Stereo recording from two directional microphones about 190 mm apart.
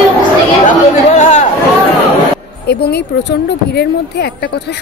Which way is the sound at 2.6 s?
60° left (ahead or behind).